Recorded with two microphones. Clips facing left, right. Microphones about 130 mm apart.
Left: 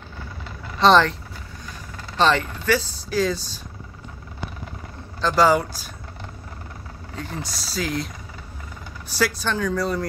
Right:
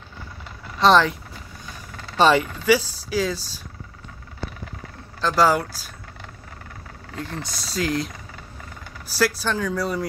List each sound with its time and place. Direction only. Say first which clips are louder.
0.7 s speech: left 1 dB; 5° right (ahead or behind)
2.1 s speech: right 2 dB; 10° right (ahead or behind)
5.2 s speech: left 1 dB; 5° right (ahead or behind)
7.2 s speech: even; centre (ahead or behind)